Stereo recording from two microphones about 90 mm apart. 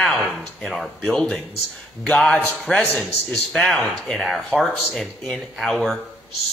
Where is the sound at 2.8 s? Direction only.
20° left (ahead or behind).